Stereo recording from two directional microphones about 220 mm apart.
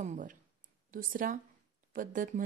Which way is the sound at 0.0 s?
35° right (ahead or behind).